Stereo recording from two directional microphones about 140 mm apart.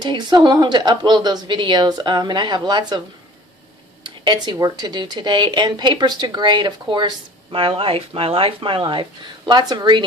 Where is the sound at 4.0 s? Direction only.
35° right (ahead or behind).